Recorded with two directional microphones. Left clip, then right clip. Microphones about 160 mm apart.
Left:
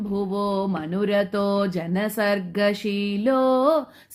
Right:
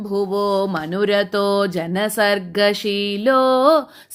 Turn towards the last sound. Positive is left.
turn(degrees=-15)  # may be behind; listen again after turning